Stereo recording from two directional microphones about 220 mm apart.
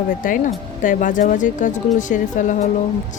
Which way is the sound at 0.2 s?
35° left (ahead or behind).